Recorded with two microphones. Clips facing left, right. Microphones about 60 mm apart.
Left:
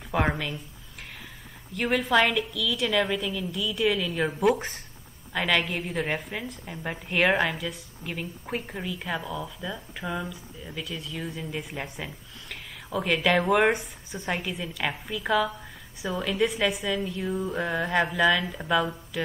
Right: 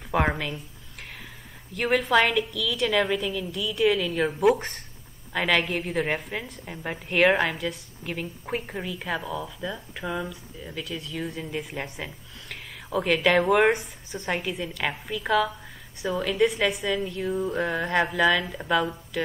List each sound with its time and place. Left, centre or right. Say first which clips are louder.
0.1 s a woman's voice: right 2 dB; centre
1.7 s a woman's voice: right 2 dB; centre